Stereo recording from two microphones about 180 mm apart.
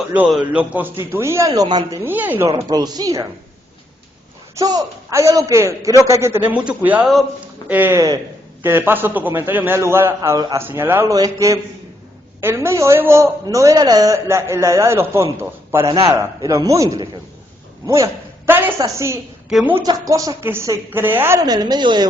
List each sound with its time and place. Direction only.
0.1 s a man's voice: 5° right (ahead or behind)
2.6 s a woman's voice: 20° right (ahead or behind)
4.5 s a man's voice: 20° right (ahead or behind)
17.8 s a sound: 15° right (ahead or behind)
18.8 s a man's voice: 15° right (ahead or behind)
19.5 s a woman's voice: centre (ahead or behind)
19.7 s a woman's voice: 20° right (ahead or behind)